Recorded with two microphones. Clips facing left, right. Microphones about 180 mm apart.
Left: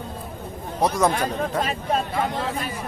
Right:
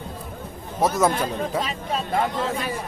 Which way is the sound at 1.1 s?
50° left (ahead or behind).